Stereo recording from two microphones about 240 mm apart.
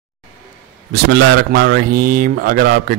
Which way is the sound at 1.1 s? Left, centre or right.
Right.